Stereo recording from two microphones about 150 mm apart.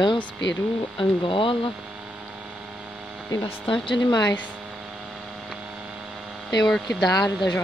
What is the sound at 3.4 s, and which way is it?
Speech, 35° left (ahead or behind).